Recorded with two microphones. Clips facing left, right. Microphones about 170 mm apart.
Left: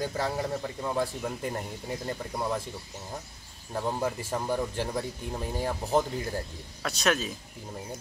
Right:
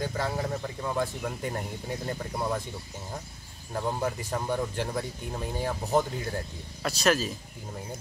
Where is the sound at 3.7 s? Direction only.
Centre (ahead or behind).